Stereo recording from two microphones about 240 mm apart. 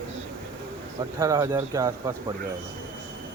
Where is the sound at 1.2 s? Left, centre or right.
Centre.